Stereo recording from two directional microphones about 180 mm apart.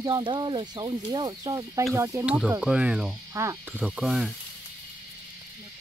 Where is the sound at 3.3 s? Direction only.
15° right (ahead or behind).